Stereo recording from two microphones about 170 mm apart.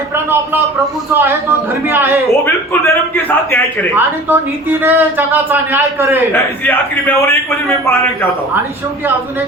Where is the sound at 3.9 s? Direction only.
10° right (ahead or behind).